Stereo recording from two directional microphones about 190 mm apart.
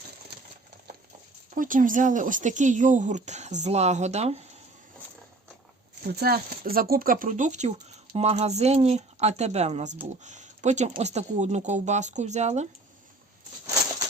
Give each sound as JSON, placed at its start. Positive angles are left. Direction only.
{"t": 1.5, "sound": "speech", "side_deg": -45}
{"t": 6.1, "sound": "speech", "side_deg": -55}